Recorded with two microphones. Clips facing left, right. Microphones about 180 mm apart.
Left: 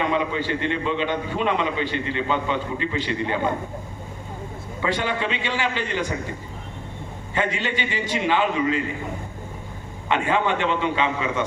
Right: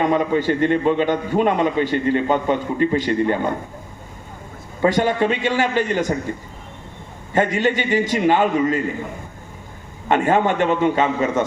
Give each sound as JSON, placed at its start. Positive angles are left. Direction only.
{"t": 0.0, "sound": "a man's voice", "side_deg": -45}
{"t": 4.8, "sound": "a man's voice", "side_deg": -45}
{"t": 7.3, "sound": "a man's voice", "side_deg": -45}
{"t": 10.1, "sound": "a man's voice", "side_deg": -45}